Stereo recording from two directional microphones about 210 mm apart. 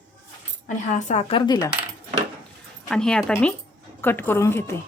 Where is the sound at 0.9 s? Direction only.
35° left (ahead or behind).